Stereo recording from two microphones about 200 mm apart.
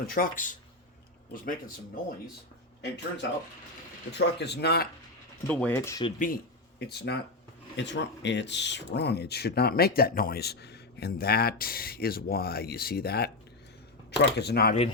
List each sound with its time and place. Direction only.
0.1 s speech: 45° left (ahead or behind)
2.8 s speech: 60° left (ahead or behind)
5.5 s speech: 10° left (ahead or behind)
6.1 s speech: 45° left (ahead or behind)